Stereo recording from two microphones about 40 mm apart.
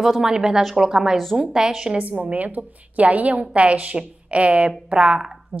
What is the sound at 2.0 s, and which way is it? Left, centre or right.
A woman's voice, right.